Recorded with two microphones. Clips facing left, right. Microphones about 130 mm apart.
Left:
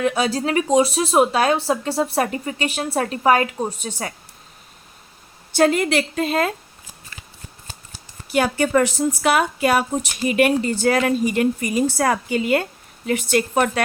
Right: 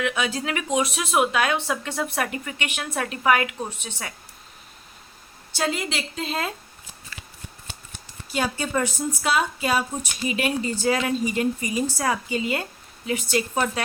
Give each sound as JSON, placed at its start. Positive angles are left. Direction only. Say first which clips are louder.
{"t": 0.0, "sound": "speech", "louder": "left 6 dB", "side_deg": 35}
{"t": 5.5, "sound": "speech", "louder": "left 10 dB", "side_deg": 55}
{"t": 8.3, "sound": "speech", "louder": "left 7 dB", "side_deg": 65}